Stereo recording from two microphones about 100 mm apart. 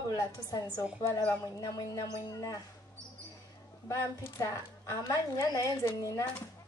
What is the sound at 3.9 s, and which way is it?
A woman's voice, 30° left (ahead or behind).